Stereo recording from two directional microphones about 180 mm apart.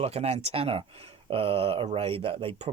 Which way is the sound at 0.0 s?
35° right (ahead or behind).